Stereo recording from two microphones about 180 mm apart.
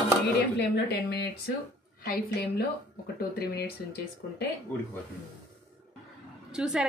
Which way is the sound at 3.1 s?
60° left (ahead or behind).